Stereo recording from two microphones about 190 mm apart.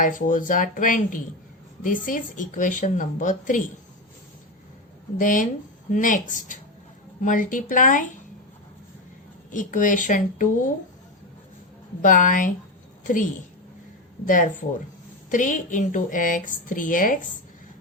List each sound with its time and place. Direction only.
0.0 s speech: 45° left (ahead or behind)
5.1 s speech: 45° left (ahead or behind)
9.5 s speech: 45° left (ahead or behind)
12.0 s speech: 45° left (ahead or behind)
15.3 s speech: 40° left (ahead or behind)